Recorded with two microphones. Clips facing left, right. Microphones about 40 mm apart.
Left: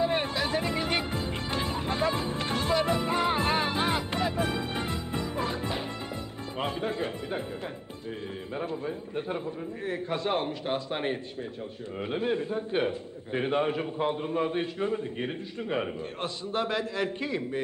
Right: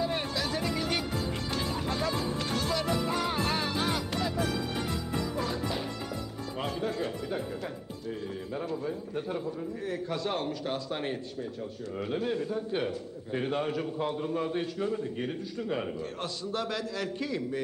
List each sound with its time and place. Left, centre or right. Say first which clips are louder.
0.0 s music: left 4 dB; left
8.5 s a man's voice: left 1 dB; left